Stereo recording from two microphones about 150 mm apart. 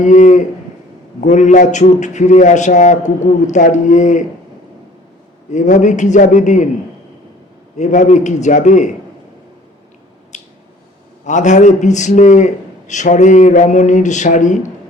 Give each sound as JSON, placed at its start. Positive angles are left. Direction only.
{"t": 0.0, "sound": "a man's voice", "side_deg": 55}
{"t": 5.5, "sound": "a man's voice", "side_deg": 55}
{"t": 7.8, "sound": "a man's voice", "side_deg": 55}
{"t": 10.3, "sound": "squish", "side_deg": 55}
{"t": 11.3, "sound": "a man's voice", "side_deg": 55}